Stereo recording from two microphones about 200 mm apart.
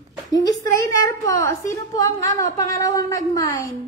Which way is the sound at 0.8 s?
15° left (ahead or behind).